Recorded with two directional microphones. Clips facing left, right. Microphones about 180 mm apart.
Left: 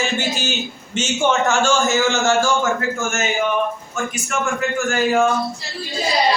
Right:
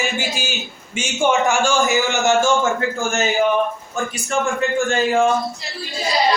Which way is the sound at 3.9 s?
30° right (ahead or behind).